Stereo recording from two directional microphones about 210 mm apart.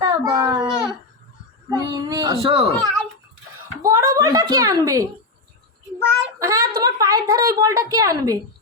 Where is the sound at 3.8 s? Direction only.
15° right (ahead or behind).